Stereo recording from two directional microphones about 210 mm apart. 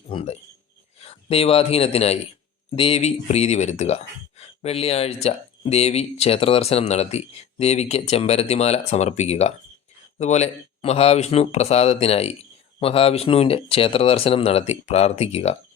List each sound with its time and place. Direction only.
0.1 s a man's voice: 25° left (ahead or behind)